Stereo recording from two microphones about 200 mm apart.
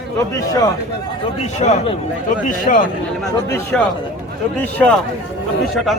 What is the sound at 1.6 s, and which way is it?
Speech, 40° left (ahead or behind).